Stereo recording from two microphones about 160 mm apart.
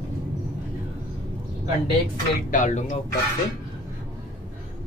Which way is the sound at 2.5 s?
50° left (ahead or behind).